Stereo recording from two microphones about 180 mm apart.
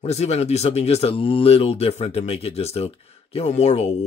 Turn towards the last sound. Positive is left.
turn(degrees=35)  # may be behind; listen again after turning